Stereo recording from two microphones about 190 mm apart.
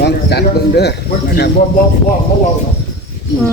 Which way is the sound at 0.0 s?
60° left (ahead or behind).